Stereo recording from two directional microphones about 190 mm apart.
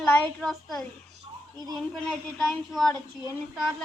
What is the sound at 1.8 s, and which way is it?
A child's voice, 5° left (ahead or behind).